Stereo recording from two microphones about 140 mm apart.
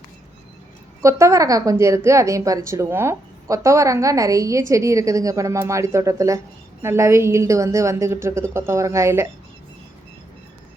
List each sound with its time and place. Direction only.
1.0 s a woman's voice: 20° right (ahead or behind)